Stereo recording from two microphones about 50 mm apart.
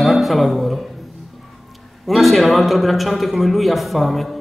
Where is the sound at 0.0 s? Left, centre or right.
Centre.